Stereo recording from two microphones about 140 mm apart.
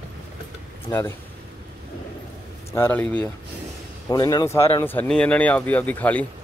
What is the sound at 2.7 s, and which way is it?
Speech, 15° left (ahead or behind).